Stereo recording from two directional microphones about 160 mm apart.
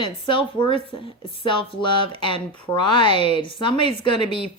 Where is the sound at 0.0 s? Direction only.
30° left (ahead or behind).